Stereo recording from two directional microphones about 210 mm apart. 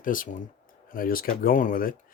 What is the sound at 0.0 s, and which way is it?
Speech, 40° left (ahead or behind).